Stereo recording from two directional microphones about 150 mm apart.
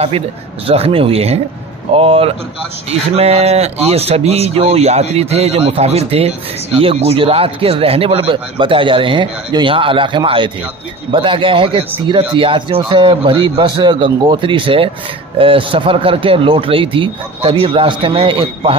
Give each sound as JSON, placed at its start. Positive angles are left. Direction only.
{"t": 0.7, "sound": "speech", "side_deg": -40}